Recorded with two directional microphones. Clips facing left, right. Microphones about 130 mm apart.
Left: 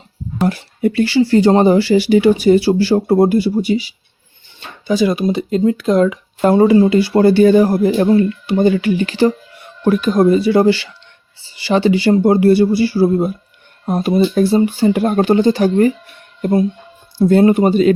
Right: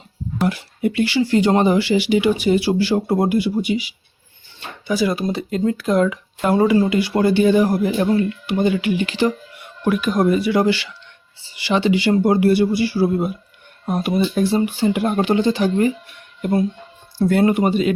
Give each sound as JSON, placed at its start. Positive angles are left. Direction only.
{"t": 0.4, "sound": "speech", "side_deg": 40}
{"t": 4.9, "sound": "speech", "side_deg": 20}
{"t": 17.2, "sound": "speech", "side_deg": 25}